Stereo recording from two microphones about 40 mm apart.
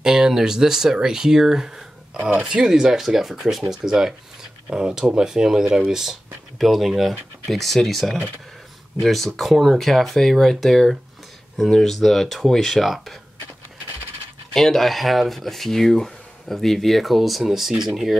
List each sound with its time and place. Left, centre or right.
0.0 s speech: centre
14.5 s speech: centre